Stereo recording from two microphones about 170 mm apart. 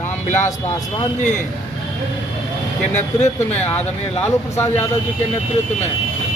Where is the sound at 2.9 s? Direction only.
45° left (ahead or behind).